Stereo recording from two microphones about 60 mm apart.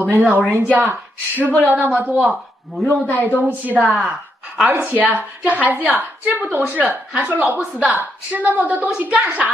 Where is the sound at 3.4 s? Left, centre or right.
Right.